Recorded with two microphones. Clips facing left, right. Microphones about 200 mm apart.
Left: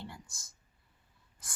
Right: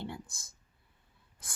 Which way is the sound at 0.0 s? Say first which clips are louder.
Right 6 dB; 60° right (ahead or behind).